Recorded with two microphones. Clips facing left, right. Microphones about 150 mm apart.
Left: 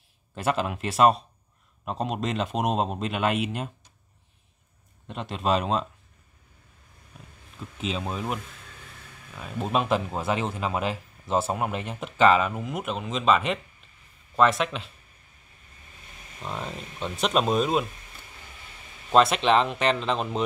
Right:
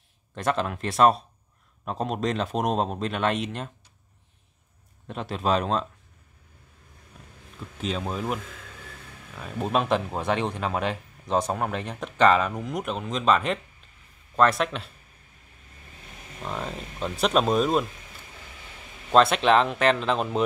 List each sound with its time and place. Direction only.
0.3 s speech: 5° left (ahead or behind)
5.0 s speech: centre (ahead or behind)
7.8 s speech: centre (ahead or behind)
9.4 s speech: centre (ahead or behind)
16.4 s speech: centre (ahead or behind)
19.1 s speech: centre (ahead or behind)